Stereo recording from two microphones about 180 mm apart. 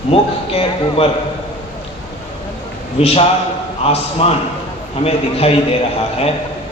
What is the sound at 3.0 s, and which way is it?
A man's voice, 35° left (ahead or behind).